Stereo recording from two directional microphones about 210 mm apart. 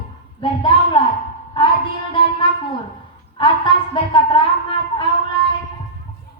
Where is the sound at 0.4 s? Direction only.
25° left (ahead or behind).